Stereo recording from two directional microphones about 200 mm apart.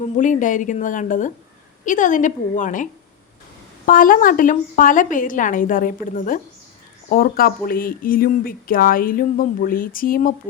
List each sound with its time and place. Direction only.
0.0 s a woman's voice: 40° left (ahead or behind)